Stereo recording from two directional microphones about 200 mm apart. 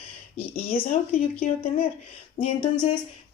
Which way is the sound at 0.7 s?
30° left (ahead or behind).